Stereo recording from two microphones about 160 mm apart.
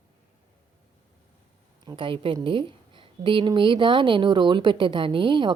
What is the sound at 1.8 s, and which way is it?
A woman's voice, 30° right (ahead or behind).